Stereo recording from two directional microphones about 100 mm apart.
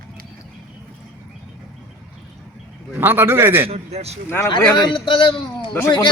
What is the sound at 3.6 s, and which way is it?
Speech, 90° right.